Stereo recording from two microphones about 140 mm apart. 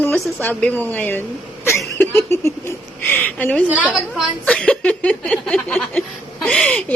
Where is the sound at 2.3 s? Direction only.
20° left (ahead or behind).